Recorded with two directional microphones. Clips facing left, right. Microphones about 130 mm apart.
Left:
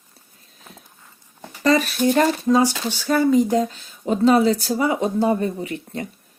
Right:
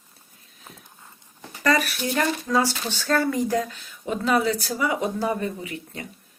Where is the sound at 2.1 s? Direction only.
20° left (ahead or behind).